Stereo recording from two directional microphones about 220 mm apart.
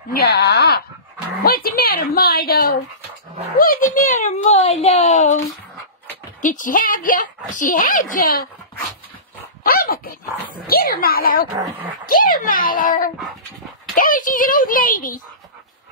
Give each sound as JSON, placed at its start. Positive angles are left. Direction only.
{"t": 0.1, "sound": "a woman's voice", "side_deg": 45}
{"t": 6.4, "sound": "speech", "side_deg": 35}
{"t": 9.6, "sound": "speech", "side_deg": 45}